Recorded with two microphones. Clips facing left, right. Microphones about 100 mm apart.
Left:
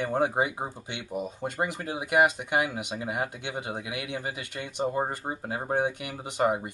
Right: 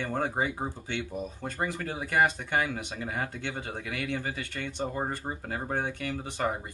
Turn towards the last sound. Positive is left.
turn(degrees=15)  # may be behind; listen again after turning